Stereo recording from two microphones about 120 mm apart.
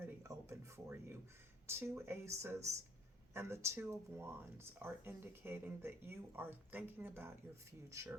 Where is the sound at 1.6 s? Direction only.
20° right (ahead or behind).